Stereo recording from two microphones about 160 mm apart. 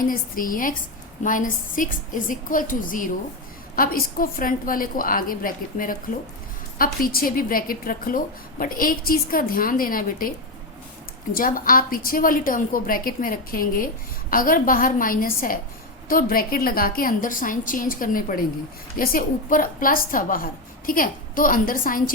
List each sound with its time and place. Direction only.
0.1 s a woman's voice: 60° left (ahead or behind)
11.3 s a woman's voice: 60° left (ahead or behind)